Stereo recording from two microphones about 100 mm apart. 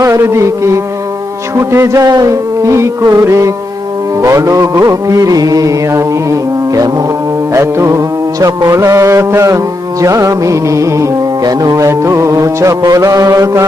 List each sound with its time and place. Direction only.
0.0 s speech: 30° right (ahead or behind)
1.5 s music: 30° right (ahead or behind)